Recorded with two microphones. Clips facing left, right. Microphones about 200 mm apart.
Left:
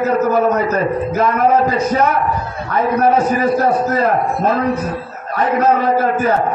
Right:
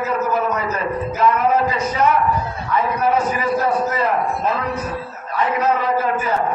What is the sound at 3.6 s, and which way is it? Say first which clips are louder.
A man's voice: left 4 dB; 45° left (ahead or behind).